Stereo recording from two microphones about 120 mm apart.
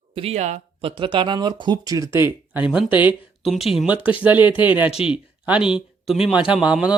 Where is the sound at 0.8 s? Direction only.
45° right (ahead or behind); by 3.2 s 15° right (ahead or behind).